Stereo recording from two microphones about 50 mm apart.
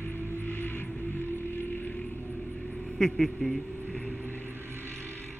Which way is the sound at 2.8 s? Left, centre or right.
Centre.